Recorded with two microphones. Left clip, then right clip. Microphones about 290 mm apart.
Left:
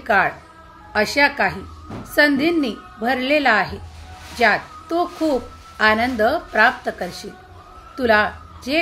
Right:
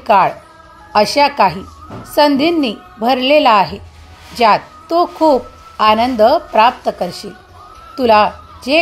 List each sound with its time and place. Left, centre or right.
0.0 s a woman's voice: centre